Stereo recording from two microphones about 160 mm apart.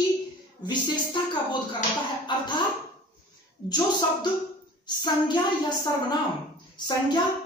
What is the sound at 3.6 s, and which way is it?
A woman's voice, 25° left (ahead or behind).